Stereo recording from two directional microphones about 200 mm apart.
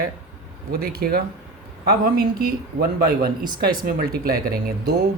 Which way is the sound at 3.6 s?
50° right (ahead or behind).